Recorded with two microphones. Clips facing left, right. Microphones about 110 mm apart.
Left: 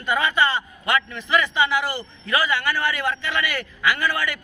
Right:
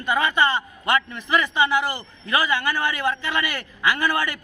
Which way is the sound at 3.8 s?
25° right (ahead or behind).